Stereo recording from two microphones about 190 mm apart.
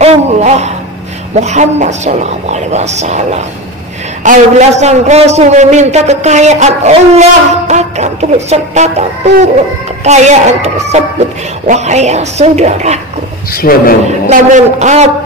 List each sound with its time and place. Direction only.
0.0 s a sound: 35° right (ahead or behind)
1.3 s a man's voice: 35° right (ahead or behind)
13.5 s a man's voice: 50° left (ahead or behind)
14.3 s a man's voice: 40° right (ahead or behind)